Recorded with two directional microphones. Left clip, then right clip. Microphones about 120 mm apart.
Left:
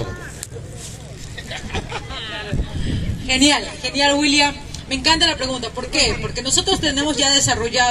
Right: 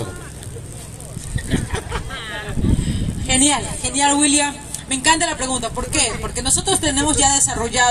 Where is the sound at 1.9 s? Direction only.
20° right (ahead or behind).